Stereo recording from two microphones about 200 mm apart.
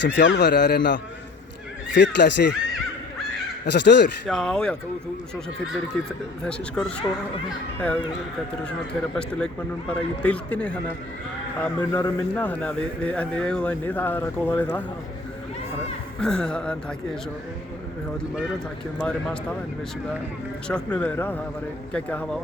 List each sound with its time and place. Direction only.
0.0 s a man's voice: 65° left (ahead or behind)
3.7 s a man's voice: 60° left (ahead or behind)
4.3 s a man's voice: 5° left (ahead or behind)
6.4 s a man's voice: 5° left (ahead or behind)
16.2 s a man's voice: 5° left (ahead or behind)
19.0 s a man's voice: 5° left (ahead or behind)
20.7 s speech: 5° left (ahead or behind)